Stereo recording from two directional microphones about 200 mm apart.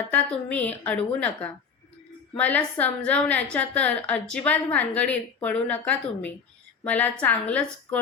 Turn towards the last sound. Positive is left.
turn(degrees=5)  # may be behind; listen again after turning